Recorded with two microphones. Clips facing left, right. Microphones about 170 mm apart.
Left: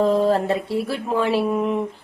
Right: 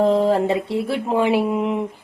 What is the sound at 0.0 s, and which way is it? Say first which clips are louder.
A woman's voice: right 1 dB; 15° right (ahead or behind).